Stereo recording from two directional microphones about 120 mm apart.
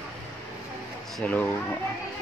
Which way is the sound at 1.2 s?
10° left (ahead or behind).